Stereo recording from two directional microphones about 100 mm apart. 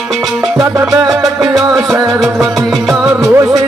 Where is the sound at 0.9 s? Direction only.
5° right (ahead or behind).